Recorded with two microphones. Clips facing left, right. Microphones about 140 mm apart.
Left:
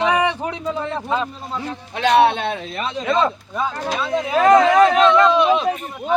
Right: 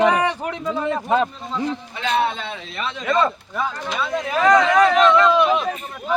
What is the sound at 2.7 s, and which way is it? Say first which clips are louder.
Speech: left 3 dB; 35° left (ahead or behind).